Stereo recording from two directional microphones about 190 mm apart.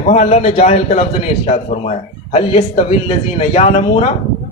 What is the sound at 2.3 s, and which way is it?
A man's voice, 30° left (ahead or behind).